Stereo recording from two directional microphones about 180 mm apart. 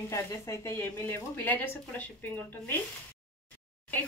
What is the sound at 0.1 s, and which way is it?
Speech, 15° left (ahead or behind).